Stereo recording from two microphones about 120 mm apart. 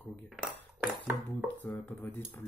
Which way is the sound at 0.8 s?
15° right (ahead or behind).